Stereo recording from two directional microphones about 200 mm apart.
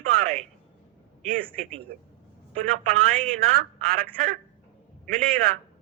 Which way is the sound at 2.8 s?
45° right (ahead or behind).